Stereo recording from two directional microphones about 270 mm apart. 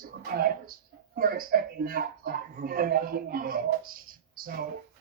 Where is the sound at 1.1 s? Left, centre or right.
Right.